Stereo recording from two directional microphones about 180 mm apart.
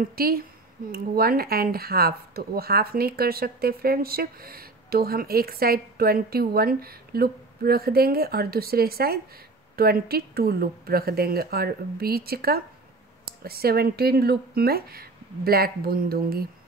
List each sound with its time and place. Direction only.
0.1 s speech: 55° right (ahead or behind)